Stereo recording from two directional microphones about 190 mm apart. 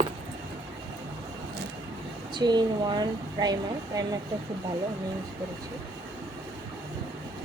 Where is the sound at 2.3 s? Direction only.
25° right (ahead or behind).